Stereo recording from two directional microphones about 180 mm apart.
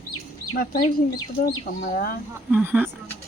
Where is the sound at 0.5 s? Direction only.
55° left (ahead or behind).